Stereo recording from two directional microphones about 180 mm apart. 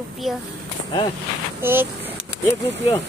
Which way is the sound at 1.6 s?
10° right (ahead or behind).